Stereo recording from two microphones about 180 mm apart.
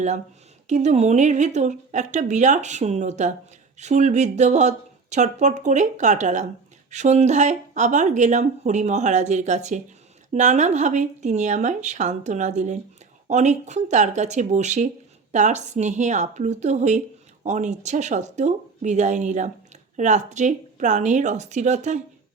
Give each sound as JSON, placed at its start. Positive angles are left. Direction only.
{"t": 0.7, "sound": "speech", "side_deg": -40}